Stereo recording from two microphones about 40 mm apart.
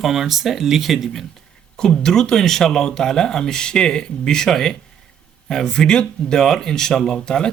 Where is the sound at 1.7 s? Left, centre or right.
Centre.